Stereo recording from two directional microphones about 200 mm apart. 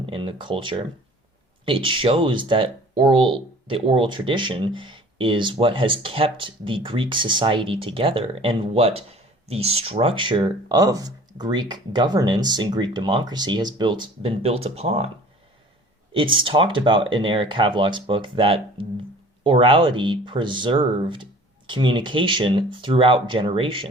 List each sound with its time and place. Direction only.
0.0 s speech: 25° right (ahead or behind)
16.1 s speech: 25° right (ahead or behind)